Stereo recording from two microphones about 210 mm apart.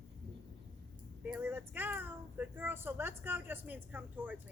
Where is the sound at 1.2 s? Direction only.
10° right (ahead or behind).